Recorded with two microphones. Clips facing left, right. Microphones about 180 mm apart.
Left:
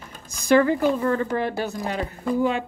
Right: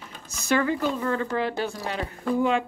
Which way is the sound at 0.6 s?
40° left (ahead or behind).